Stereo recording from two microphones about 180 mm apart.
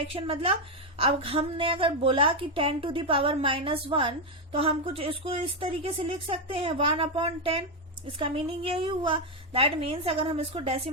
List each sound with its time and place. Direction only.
0.1 s a woman's voice: 30° right (ahead or behind)